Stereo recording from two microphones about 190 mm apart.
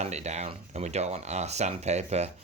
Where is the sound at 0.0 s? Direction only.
35° right (ahead or behind).